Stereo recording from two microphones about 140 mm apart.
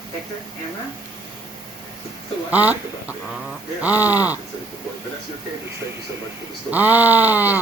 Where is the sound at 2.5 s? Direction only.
10° right (ahead or behind).